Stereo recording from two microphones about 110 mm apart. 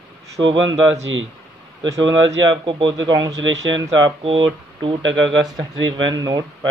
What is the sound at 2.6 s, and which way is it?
Speech, 45° right (ahead or behind).